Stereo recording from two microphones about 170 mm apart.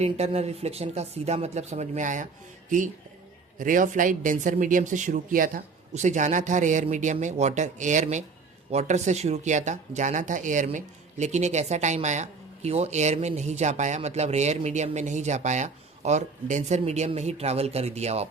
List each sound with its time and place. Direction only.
0.0 s speech: 40° right (ahead or behind)